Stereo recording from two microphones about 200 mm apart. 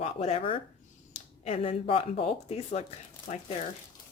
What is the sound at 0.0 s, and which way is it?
A woman's voice, 30° left (ahead or behind).